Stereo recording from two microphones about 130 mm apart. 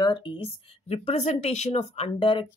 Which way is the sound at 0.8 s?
55° left (ahead or behind).